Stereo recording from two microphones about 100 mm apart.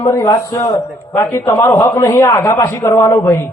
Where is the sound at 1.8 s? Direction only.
40° left (ahead or behind).